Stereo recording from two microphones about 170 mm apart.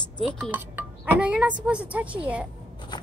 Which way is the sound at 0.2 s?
10° right (ahead or behind).